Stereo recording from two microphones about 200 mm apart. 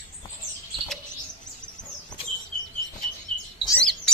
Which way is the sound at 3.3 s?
30° right (ahead or behind).